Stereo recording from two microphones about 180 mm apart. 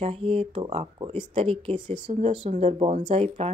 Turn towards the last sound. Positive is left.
turn(degrees=-35)  # may be behind; listen again after turning